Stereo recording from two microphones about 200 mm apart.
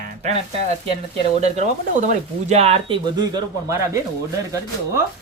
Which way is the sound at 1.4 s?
35° right (ahead or behind).